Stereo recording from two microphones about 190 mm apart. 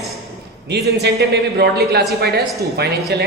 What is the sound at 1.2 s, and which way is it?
Speech, 60° right (ahead or behind).